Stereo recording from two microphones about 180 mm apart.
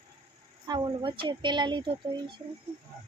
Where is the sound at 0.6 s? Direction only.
25° right (ahead or behind).